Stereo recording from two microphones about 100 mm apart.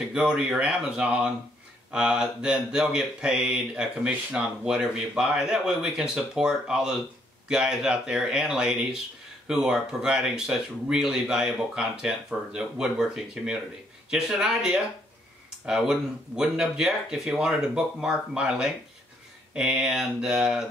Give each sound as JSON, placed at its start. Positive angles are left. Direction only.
{"t": 0.1, "sound": "speech", "side_deg": -10}